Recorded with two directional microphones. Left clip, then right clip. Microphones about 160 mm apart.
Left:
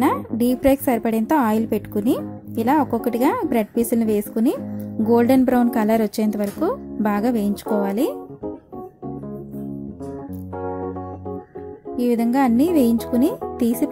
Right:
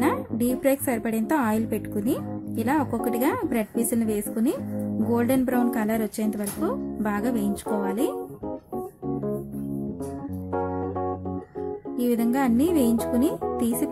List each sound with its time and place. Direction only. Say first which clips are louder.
0.0 s a woman's voice: left 5 dB; 30° left (ahead or behind)
10.5 s music: even; centre (ahead or behind)
12.0 s speech: left 5 dB; 25° left (ahead or behind)
13.6 s music: left 5 dB; 30° left (ahead or behind)